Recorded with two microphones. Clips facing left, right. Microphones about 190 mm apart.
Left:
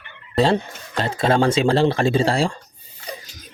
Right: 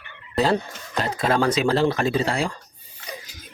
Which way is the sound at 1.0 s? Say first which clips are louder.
Left 3 dB; 30° left (ahead or behind).